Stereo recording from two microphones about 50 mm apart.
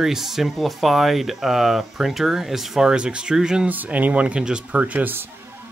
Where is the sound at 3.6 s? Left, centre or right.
Right; by 4.8 s centre.